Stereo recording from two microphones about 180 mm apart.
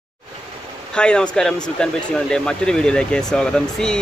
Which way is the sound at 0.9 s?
5° left (ahead or behind).